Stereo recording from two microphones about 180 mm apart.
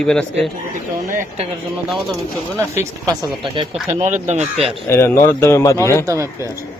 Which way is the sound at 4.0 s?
40° right (ahead or behind).